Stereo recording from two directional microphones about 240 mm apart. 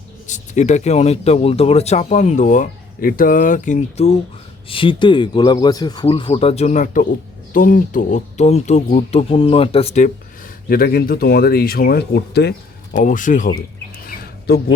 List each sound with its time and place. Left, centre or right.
0.3 s speech: left
10.7 s speech: left
14.1 s a sound: left